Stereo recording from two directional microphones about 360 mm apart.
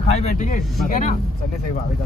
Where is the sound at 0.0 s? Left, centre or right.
Centre.